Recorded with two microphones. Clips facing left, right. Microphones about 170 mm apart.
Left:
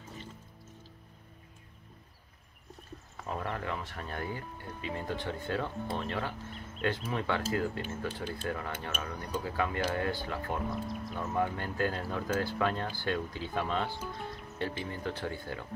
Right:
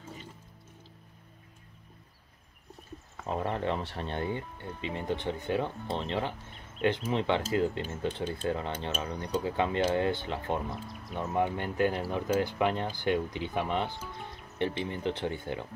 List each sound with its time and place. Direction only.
3.3 s speech: 25° right (ahead or behind)
10.7 s speech: centre (ahead or behind)
11.1 s speech: 20° right (ahead or behind)